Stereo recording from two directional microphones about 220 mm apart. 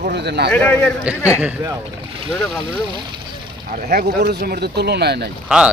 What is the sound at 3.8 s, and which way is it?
Speech, 45° right (ahead or behind).